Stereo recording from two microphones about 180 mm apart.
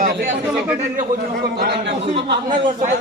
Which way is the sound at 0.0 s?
50° right (ahead or behind).